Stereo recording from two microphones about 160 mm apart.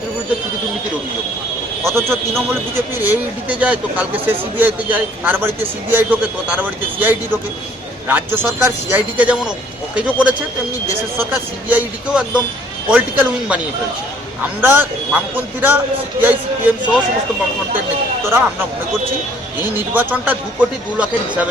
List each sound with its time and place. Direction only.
1.8 s speech: 15° right (ahead or behind)
11.7 s speech: 10° right (ahead or behind)
14.6 s speech: 15° right (ahead or behind)
18.3 s speech: 15° right (ahead or behind)
19.7 s speech: 10° right (ahead or behind)